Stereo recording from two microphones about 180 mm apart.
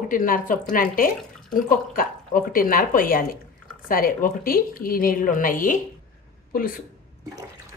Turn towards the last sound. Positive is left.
turn(degrees=50)  # may be behind; listen again after turning